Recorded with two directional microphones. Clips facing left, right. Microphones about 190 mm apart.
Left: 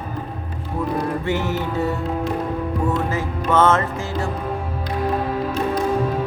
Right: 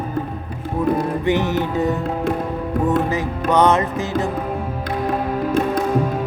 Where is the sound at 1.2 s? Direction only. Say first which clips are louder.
Right 4 dB; 20° right (ahead or behind).